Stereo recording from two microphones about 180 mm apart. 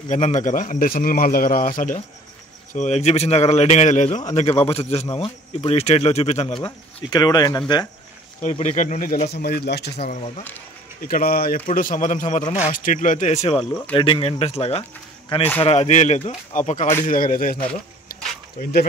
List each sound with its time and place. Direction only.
0.1 s a man's voice: 45° left (ahead or behind)
7.1 s speech: 20° left (ahead or behind)
8.4 s a man's voice: 40° left (ahead or behind)
9.3 s speech: 60° left (ahead or behind)
11.1 s a man's voice: 55° left (ahead or behind)
13.6 s speech: 5° left (ahead or behind)
13.9 s a man's voice: 30° left (ahead or behind); by 18.9 s 60° left (ahead or behind)